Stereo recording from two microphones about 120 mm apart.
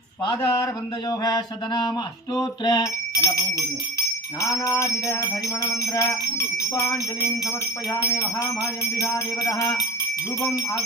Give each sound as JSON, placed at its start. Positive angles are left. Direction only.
{"t": 0.3, "sound": "jingle bell", "side_deg": 30}
{"t": 1.2, "sound": "mantra", "side_deg": 35}
{"t": 2.3, "sound": "a sound", "side_deg": 35}
{"t": 4.4, "sound": "jingle bell", "side_deg": 25}